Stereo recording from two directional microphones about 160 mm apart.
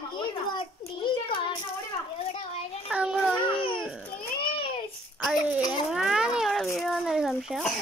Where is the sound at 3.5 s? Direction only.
30° left (ahead or behind).